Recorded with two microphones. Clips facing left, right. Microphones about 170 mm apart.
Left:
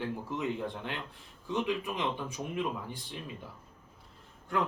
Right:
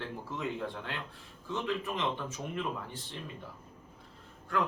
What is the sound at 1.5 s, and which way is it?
Speech, 15° left (ahead or behind).